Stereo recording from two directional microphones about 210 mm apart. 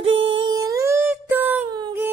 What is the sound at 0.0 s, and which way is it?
Humming, 60° right (ahead or behind).